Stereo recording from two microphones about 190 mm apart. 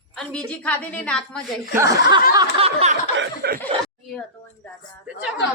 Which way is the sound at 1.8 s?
15° right (ahead or behind).